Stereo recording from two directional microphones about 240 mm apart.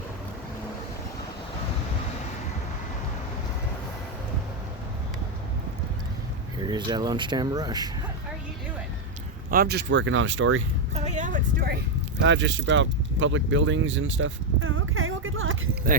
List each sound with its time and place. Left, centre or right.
6.7 s speech: centre
9.5 s speech: right
10.9 s speech: right
12.2 s keys jangling: right